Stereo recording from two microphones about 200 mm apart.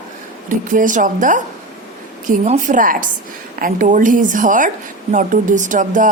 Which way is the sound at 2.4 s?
40° right (ahead or behind).